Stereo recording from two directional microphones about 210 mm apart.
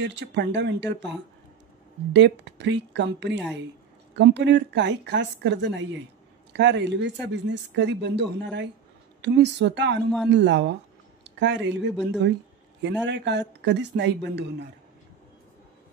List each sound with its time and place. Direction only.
0.0 s speech: 55° right (ahead or behind)
2.1 s speech: 55° right (ahead or behind)